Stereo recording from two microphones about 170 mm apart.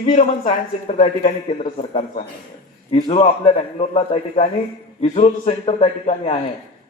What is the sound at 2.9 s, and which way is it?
A man's voice, 35° left (ahead or behind).